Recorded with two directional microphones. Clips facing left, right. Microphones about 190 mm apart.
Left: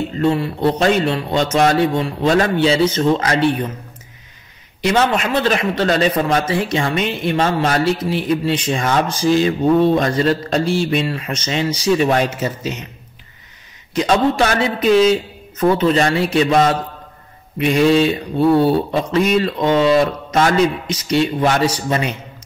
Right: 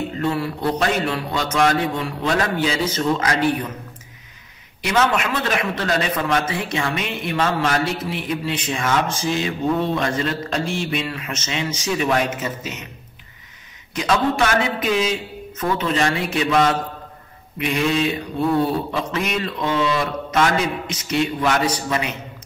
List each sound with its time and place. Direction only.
0.2 s speech: 25° left (ahead or behind)
4.8 s a man's voice: 30° left (ahead or behind)
13.9 s a man's voice: 35° left (ahead or behind)